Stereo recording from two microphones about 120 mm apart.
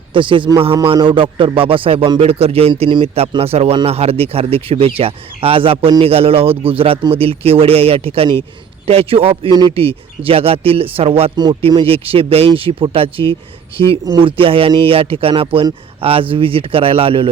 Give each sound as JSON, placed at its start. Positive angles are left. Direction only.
{"t": 0.1, "sound": "speech", "side_deg": -45}
{"t": 9.5, "sound": "speech", "side_deg": -40}